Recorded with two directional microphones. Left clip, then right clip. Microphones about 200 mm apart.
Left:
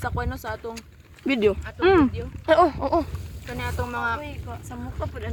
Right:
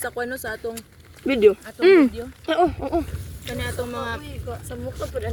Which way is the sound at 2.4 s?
25° left (ahead or behind).